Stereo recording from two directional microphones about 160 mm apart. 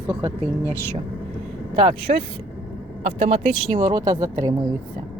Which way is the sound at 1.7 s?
35° right (ahead or behind).